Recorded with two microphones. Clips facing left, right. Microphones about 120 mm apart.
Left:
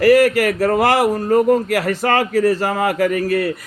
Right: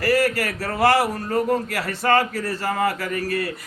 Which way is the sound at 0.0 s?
50° left (ahead or behind).